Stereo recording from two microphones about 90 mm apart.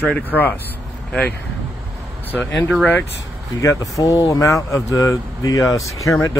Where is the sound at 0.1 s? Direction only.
20° left (ahead or behind).